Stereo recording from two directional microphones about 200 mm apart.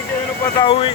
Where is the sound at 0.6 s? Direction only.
25° left (ahead or behind).